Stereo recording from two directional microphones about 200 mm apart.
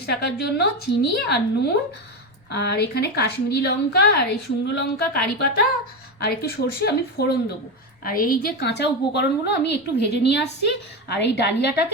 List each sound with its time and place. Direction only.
0.0 s a woman's voice: 50° left (ahead or behind)